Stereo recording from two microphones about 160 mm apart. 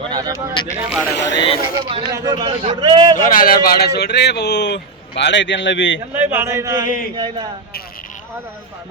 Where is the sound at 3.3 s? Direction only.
65° left (ahead or behind); by 5.7 s 90° left.